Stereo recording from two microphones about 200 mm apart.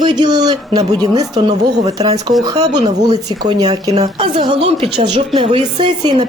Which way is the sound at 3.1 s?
20° right (ahead or behind).